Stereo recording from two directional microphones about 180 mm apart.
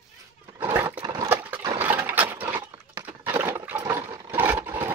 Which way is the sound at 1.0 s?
25° right (ahead or behind).